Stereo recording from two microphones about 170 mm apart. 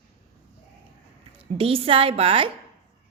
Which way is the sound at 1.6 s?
35° right (ahead or behind).